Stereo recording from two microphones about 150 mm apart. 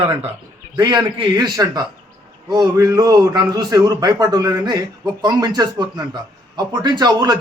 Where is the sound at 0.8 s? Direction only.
30° right (ahead or behind).